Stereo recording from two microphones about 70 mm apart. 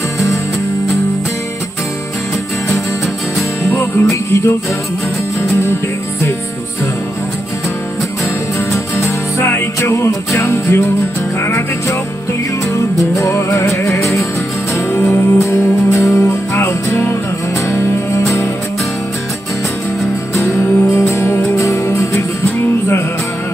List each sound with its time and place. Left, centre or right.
4.1 s music: left
8.5 s music: left
20.3 s music: left